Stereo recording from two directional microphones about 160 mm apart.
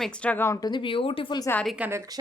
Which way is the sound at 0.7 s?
35° left (ahead or behind).